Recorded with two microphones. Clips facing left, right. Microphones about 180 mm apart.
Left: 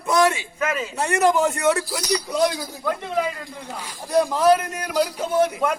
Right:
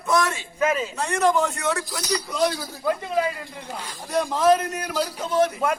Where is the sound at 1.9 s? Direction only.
15° left (ahead or behind).